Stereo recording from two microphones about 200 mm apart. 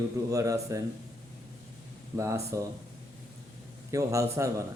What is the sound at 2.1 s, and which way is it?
Speech, 15° right (ahead or behind).